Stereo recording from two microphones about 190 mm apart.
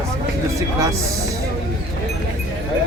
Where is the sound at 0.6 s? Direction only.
15° right (ahead or behind).